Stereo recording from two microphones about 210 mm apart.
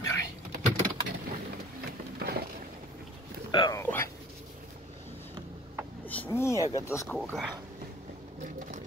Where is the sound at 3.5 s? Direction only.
20° left (ahead or behind).